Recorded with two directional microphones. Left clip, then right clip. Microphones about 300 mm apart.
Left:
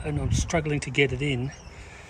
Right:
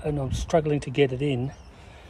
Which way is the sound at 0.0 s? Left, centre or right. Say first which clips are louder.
Right 2 dB; centre.